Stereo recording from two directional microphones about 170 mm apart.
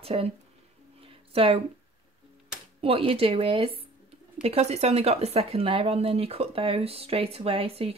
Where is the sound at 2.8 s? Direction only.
35° right (ahead or behind).